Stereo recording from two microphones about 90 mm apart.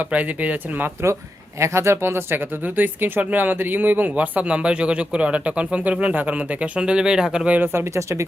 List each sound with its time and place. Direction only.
0.0 s speech: 15° right (ahead or behind)
1.5 s speech: 30° right (ahead or behind)